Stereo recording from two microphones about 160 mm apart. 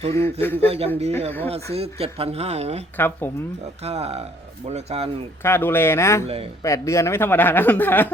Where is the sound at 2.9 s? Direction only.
10° left (ahead or behind).